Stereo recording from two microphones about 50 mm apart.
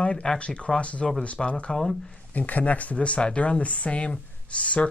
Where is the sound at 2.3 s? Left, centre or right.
Left.